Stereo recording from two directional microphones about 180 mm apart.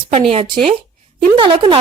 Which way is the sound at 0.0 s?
35° right (ahead or behind).